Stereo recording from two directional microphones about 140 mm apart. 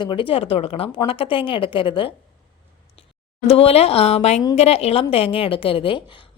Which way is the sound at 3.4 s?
45° left (ahead or behind).